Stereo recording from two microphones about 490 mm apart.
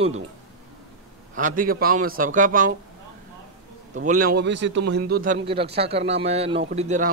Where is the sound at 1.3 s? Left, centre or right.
Centre.